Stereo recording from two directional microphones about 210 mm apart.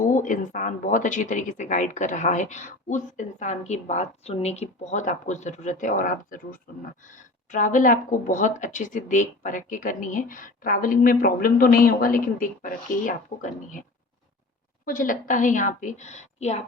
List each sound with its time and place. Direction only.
0.0 s speech: 40° left (ahead or behind)
14.8 s speech: 40° left (ahead or behind)